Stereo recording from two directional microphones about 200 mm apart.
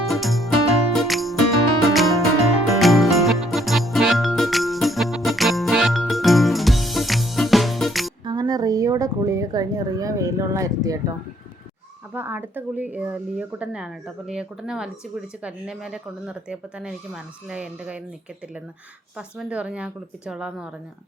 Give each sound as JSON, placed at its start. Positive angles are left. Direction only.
{"t": 0.0, "sound": "music", "side_deg": 0}
{"t": 8.2, "sound": "a woman's voice", "side_deg": -20}
{"t": 12.1, "sound": "speech", "side_deg": -10}
{"t": 19.1, "sound": "speech", "side_deg": -5}